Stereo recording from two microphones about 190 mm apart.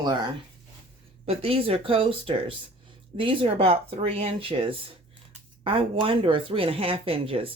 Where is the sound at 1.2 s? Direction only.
30° right (ahead or behind).